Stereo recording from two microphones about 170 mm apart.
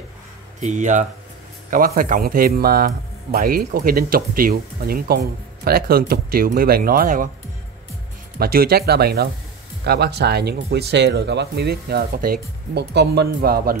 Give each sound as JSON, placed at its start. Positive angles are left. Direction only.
{"t": 0.6, "sound": "speech", "side_deg": -45}
{"t": 8.4, "sound": "speech", "side_deg": -65}